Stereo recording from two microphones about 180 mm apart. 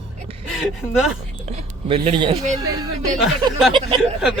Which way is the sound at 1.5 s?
30° right (ahead or behind).